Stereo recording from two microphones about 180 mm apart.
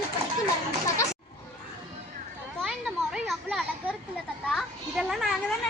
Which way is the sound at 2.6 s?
Centre (ahead or behind).